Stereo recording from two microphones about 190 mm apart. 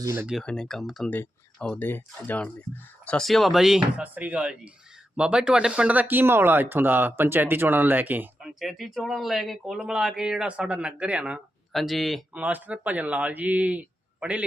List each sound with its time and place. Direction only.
0.0 s speech: 15° right (ahead or behind)
0.3 s speech: centre (ahead or behind)